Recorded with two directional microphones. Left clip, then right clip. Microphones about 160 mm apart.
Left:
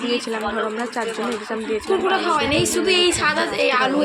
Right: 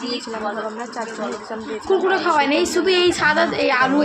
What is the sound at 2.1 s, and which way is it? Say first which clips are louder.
A woman's voice: right 2 dB; 70° right (ahead or behind).